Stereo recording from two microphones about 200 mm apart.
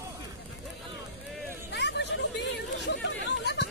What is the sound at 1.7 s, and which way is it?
Chatter, 60° left (ahead or behind).